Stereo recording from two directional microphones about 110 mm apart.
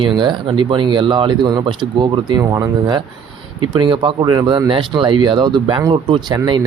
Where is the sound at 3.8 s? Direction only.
50° right (ahead or behind).